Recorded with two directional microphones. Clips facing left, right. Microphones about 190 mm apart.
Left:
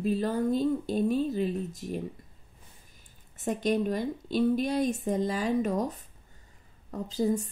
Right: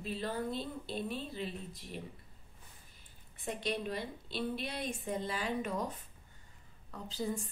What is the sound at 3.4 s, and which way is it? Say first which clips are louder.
A woman's voice: left 10 dB; 45° left (ahead or behind).